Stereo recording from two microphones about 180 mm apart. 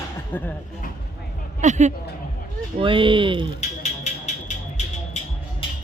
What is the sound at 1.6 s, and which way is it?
Speech, 40° right (ahead or behind).